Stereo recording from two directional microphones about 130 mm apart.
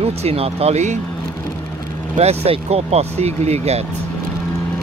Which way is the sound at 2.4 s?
50° right (ahead or behind).